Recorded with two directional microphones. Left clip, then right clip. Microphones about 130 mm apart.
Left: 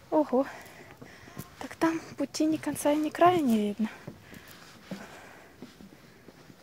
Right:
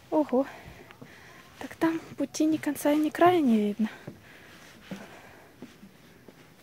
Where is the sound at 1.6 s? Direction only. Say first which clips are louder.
Even; 20° right (ahead or behind).